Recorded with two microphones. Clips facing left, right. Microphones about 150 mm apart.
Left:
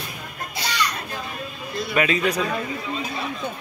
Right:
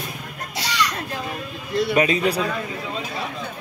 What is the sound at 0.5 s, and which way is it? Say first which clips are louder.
Children playing: right 2 dB; 90° right.